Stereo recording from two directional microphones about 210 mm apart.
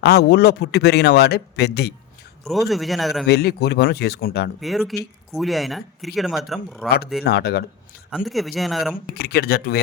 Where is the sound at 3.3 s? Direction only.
50° left (ahead or behind).